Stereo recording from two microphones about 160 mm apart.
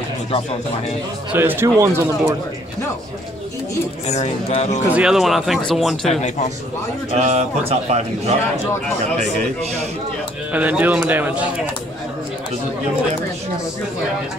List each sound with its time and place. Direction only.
1.3 s speech: 15° right (ahead or behind)
4.1 s speech: 45° left (ahead or behind)
4.8 s speech: 5° right (ahead or behind)
7.1 s speech: 45° right (ahead or behind)
10.5 s speech: 10° right (ahead or behind)